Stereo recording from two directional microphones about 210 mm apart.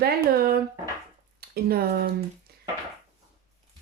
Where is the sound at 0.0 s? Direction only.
45° right (ahead or behind).